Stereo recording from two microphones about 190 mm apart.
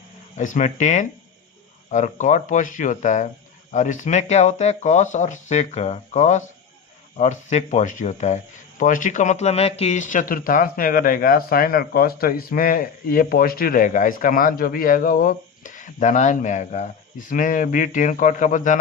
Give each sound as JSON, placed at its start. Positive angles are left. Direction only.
{"t": 0.3, "sound": "speech", "side_deg": 40}